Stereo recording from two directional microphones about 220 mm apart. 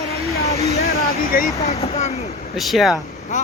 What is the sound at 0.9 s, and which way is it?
Speech, 45° left (ahead or behind).